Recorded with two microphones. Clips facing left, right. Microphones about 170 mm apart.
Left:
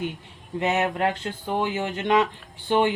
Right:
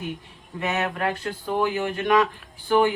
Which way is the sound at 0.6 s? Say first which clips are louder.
Left 2 dB; 25° left (ahead or behind).